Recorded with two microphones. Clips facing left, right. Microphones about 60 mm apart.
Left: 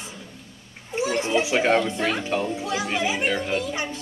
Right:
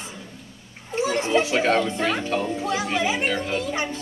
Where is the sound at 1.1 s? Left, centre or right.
Right.